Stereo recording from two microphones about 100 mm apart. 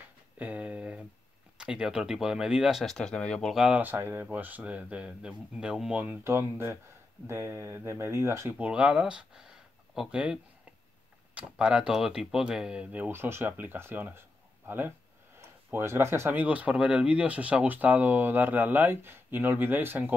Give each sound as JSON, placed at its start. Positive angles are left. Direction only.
{"t": 0.4, "sound": "a sound", "side_deg": -15}
{"t": 1.6, "sound": "speech", "side_deg": -10}
{"t": 2.8, "sound": "speech", "side_deg": 5}
{"t": 3.5, "sound": "speech", "side_deg": -10}
{"t": 6.2, "sound": "speech", "side_deg": -25}
{"t": 8.5, "sound": "speech", "side_deg": -15}